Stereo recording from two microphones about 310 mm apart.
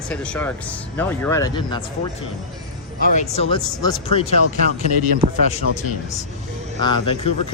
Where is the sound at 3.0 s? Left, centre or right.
Left.